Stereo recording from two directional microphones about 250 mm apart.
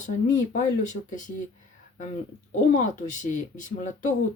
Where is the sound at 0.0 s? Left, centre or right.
Left.